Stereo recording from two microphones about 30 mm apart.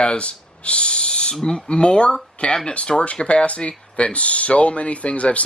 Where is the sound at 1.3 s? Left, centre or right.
Left.